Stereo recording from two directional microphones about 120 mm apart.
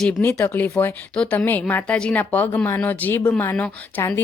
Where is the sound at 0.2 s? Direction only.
15° left (ahead or behind).